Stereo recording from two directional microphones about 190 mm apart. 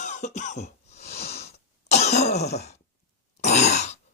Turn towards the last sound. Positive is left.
turn(degrees=35)  # may be behind; listen again after turning